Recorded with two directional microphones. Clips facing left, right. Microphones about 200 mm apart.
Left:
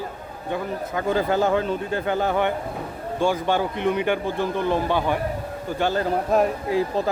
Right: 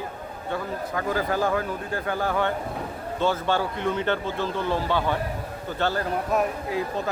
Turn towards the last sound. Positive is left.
turn(degrees=30)  # may be behind; listen again after turning